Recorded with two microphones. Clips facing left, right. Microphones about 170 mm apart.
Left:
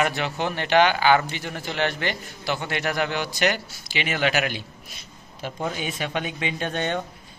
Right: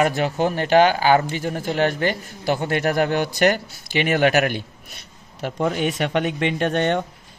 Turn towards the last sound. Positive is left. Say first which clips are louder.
# right 6 dB
turn(degrees=-60)  # may be behind; listen again after turning